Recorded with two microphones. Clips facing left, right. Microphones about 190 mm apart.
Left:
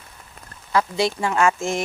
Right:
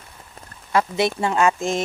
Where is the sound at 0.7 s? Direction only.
25° right (ahead or behind).